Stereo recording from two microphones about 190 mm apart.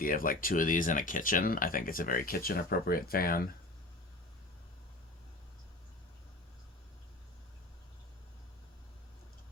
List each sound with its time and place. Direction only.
0.0 s speech: 45° left (ahead or behind)